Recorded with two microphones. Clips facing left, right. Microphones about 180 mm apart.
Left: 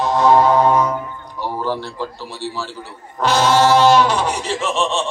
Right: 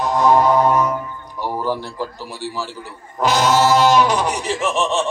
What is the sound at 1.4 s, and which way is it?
A man's voice, 10° right (ahead or behind).